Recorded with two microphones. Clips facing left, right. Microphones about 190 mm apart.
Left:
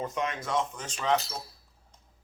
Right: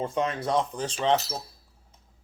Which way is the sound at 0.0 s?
30° right (ahead or behind).